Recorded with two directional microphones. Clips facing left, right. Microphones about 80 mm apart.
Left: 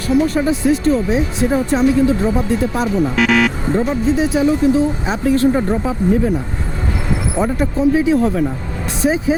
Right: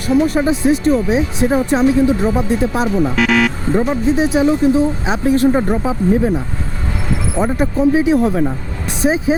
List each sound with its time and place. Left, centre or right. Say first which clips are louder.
0.3 s speech: right 1 dB; centre
3.2 s speech: left 1 dB; centre
3.7 s speech: right 1 dB; centre
7.4 s speech: right 1 dB; centre